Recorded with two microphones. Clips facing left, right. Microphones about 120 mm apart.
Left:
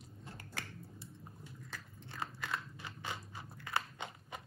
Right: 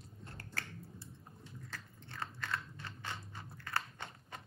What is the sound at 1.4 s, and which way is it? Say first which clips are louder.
Crunch: right 2 dB; 10° left (ahead or behind).